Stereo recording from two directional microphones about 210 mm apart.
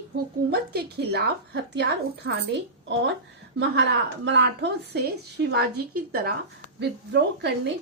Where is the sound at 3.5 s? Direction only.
55° right (ahead or behind).